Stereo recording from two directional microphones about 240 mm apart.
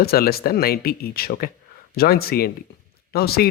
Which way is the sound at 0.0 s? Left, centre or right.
Left.